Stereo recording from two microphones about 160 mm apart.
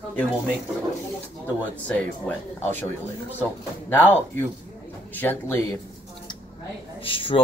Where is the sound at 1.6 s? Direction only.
10° left (ahead or behind).